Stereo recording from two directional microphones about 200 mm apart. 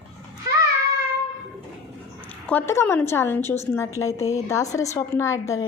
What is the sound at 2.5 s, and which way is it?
A woman's voice, 10° left (ahead or behind).